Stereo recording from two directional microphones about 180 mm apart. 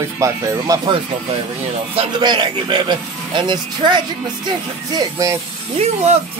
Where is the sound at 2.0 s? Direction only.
25° right (ahead or behind).